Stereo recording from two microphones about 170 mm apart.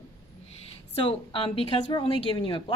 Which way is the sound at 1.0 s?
30° left (ahead or behind).